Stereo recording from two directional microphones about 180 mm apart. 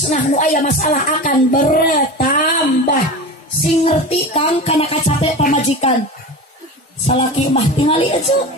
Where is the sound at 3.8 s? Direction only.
35° left (ahead or behind).